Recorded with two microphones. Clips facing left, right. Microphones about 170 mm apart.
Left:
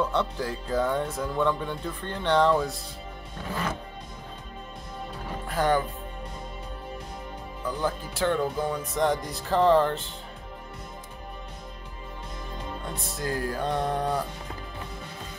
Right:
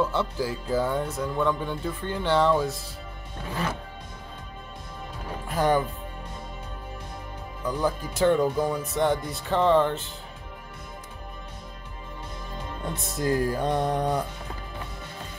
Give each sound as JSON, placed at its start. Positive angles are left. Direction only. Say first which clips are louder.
{"t": 0.0, "sound": "speech", "louder": "right 1 dB", "side_deg": -5}
{"t": 5.5, "sound": "speech", "louder": "right 1 dB", "side_deg": -15}
{"t": 7.6, "sound": "music", "louder": "right 3 dB", "side_deg": -15}
{"t": 8.7, "sound": "speech", "louder": "right 1 dB", "side_deg": -5}
{"t": 13.2, "sound": "music", "louder": "right 5 dB", "side_deg": -15}